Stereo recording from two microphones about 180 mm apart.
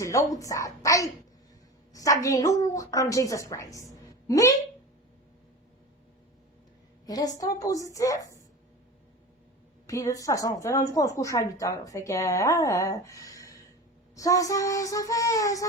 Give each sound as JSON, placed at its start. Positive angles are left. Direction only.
{"t": 0.0, "sound": "speech", "side_deg": 20}
{"t": 4.3, "sound": "child singing", "side_deg": 20}
{"t": 7.0, "sound": "child singing", "side_deg": 20}
{"t": 9.8, "sound": "speech", "side_deg": 20}
{"t": 14.2, "sound": "child singing", "side_deg": 20}